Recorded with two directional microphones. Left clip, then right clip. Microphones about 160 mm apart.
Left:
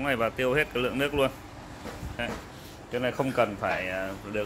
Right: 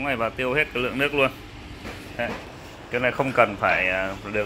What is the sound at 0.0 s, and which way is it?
Speech, 30° left (ahead or behind).